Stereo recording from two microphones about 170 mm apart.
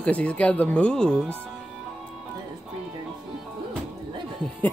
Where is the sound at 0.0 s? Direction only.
5° left (ahead or behind).